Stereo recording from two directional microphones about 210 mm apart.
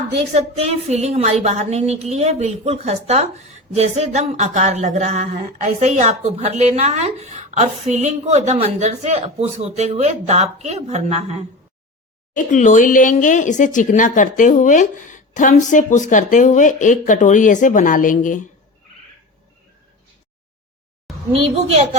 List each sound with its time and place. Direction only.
0.3 s speech: 30° right (ahead or behind)
12.3 s speech: 40° left (ahead or behind)
21.1 s a sound: centre (ahead or behind)